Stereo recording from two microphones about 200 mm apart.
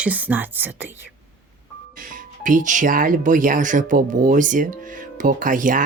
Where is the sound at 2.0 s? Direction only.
40° right (ahead or behind).